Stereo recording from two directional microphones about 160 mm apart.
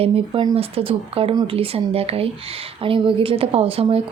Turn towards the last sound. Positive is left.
turn(degrees=-35)  # may be behind; listen again after turning